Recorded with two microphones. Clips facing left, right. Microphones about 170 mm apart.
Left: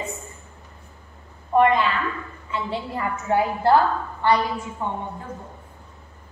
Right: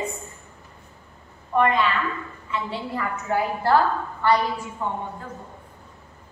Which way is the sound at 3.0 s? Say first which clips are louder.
Left 3 dB; 25° left (ahead or behind).